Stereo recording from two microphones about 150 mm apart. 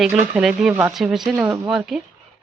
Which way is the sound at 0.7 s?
15° right (ahead or behind).